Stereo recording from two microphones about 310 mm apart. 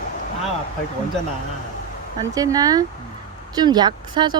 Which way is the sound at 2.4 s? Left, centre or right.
Centre.